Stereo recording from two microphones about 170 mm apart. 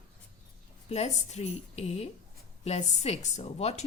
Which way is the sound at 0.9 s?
40° left (ahead or behind).